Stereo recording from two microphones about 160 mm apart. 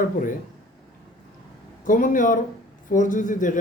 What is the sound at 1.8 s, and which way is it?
A man's voice, 55° left (ahead or behind).